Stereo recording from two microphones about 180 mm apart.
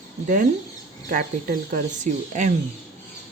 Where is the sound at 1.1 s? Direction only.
50° right (ahead or behind).